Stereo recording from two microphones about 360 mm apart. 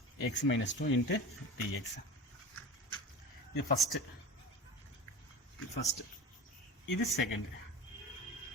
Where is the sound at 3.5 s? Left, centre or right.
Left.